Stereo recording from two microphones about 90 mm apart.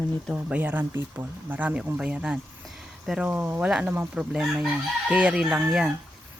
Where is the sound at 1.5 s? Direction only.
15° right (ahead or behind).